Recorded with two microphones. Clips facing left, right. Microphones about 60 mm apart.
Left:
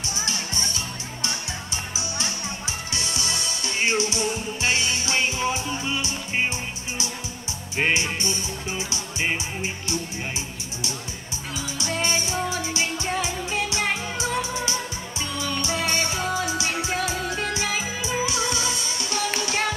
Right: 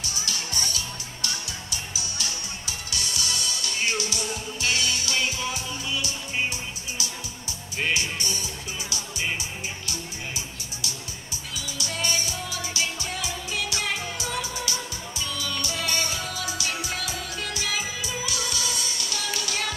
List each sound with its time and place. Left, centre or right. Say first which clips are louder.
0.1 s music: left 4 dB; left
7.7 s music: left 4 dB; left
11.5 s music: left 5 dB; left